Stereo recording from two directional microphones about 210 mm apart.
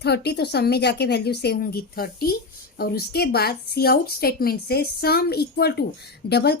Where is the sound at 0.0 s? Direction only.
50° left (ahead or behind).